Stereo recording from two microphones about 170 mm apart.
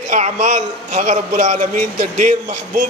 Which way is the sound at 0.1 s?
45° right (ahead or behind).